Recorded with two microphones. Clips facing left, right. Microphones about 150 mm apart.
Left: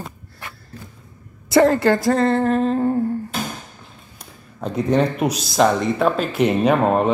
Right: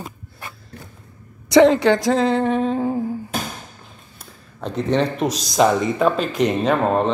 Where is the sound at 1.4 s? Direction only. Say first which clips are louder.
Right 2 dB; 5° left (ahead or behind).